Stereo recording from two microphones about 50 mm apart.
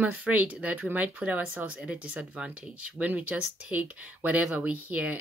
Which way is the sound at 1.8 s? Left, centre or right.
Right.